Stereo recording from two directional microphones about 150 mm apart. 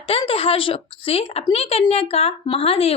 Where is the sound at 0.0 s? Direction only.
40° left (ahead or behind).